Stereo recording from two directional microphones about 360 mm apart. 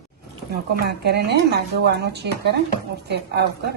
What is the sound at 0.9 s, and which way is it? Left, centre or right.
Speech, right.